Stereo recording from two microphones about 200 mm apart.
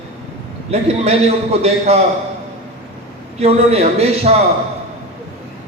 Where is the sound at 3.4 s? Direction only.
30° right (ahead or behind).